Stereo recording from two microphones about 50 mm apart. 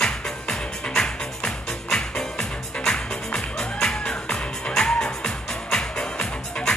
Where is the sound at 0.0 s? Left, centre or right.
Centre.